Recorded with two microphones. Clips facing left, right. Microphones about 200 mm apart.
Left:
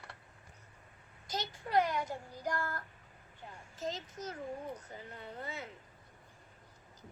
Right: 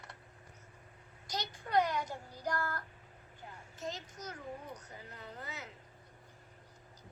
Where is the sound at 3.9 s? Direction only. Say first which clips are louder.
Left 3 dB; 25° left (ahead or behind).